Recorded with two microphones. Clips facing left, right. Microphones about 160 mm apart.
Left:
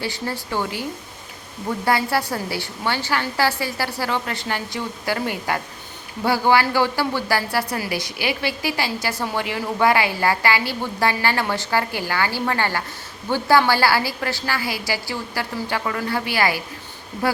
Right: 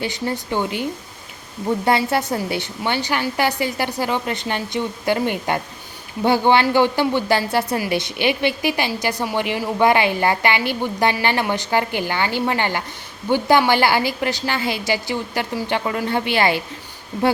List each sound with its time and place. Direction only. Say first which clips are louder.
0.0 s a woman's voice: right 3 dB; 20° right (ahead or behind)